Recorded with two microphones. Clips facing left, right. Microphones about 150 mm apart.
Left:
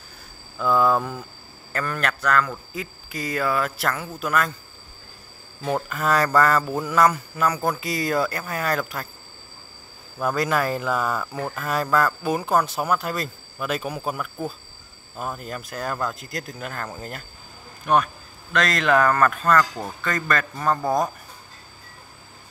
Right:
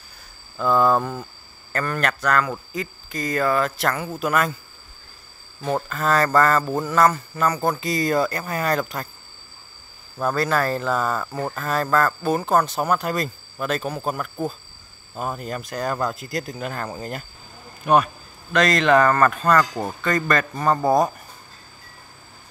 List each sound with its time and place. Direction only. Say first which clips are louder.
0.6 s speech: right 1 dB; centre (ahead or behind)
5.9 s speech: right 2 dB; 10° left (ahead or behind)
6.6 s speech: right 2 dB; centre (ahead or behind)
6.9 s speech: even; 10° left (ahead or behind)
10.2 s speech: right 1 dB; 15° left (ahead or behind); by 19.6 s centre (ahead or behind)
19.6 s speech: right 2 dB; 15° right (ahead or behind)
20.0 s speech: right 3 dB; centre (ahead or behind)